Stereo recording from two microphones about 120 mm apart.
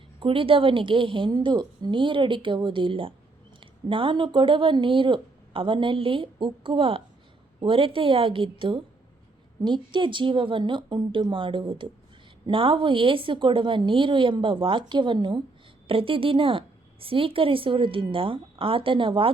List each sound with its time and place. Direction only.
0.2 s a woman's voice: 50° right (ahead or behind)